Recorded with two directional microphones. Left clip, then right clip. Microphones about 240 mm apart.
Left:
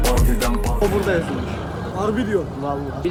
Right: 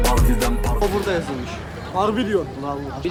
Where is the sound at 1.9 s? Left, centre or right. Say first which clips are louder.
Right 2 dB; right.